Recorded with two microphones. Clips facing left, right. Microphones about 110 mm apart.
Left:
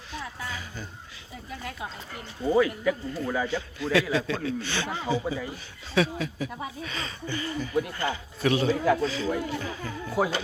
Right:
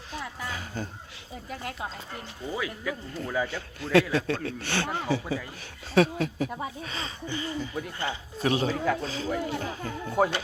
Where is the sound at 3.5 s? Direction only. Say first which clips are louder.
Right 6 dB; 50° right (ahead or behind).